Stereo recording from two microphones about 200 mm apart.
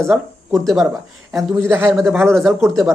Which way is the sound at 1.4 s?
15° right (ahead or behind).